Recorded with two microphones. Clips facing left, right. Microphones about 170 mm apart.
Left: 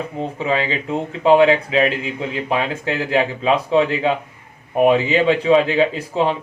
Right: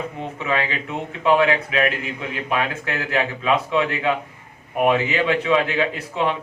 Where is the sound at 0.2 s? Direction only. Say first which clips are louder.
Left 4 dB; 30° left (ahead or behind).